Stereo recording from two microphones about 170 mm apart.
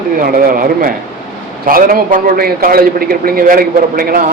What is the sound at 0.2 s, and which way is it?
A man's voice, 60° right (ahead or behind).